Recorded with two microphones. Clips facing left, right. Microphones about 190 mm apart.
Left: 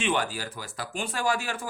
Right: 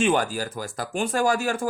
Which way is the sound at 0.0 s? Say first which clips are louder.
Right 6 dB; 45° right (ahead or behind).